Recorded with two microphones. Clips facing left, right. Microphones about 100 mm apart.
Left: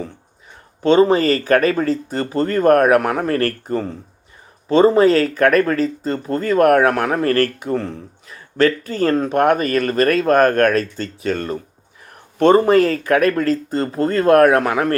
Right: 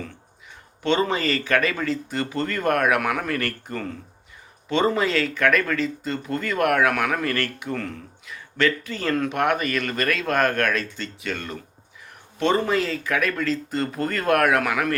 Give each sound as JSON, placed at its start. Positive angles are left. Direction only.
{"t": 0.8, "sound": "speech", "side_deg": 35}